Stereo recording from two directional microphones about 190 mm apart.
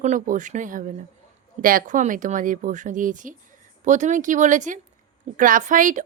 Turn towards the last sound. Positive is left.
turn(degrees=-40)  # may be behind; listen again after turning